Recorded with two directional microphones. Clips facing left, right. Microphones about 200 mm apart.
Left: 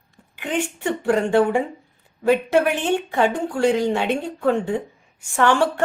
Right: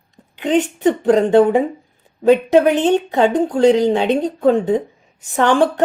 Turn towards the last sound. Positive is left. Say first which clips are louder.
# right 4 dB
turn(degrees=-15)  # may be behind; listen again after turning